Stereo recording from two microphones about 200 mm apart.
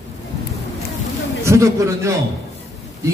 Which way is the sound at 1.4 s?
15° right (ahead or behind).